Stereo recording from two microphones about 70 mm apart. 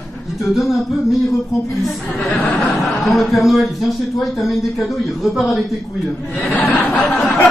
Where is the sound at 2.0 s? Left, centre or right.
Left.